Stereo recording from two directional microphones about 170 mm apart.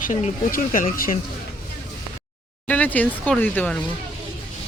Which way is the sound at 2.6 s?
10° left (ahead or behind).